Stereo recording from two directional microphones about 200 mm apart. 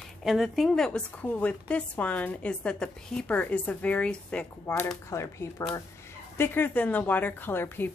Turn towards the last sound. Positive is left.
turn(degrees=10)  # may be behind; listen again after turning